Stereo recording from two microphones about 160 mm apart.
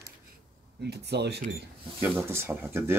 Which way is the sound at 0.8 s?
90° right.